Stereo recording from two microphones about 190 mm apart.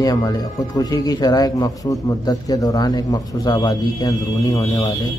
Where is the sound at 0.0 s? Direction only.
20° left (ahead or behind).